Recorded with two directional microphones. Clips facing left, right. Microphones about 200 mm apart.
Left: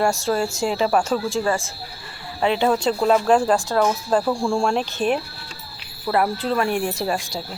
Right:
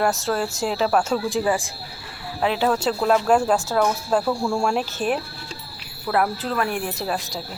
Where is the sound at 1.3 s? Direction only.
15° right (ahead or behind).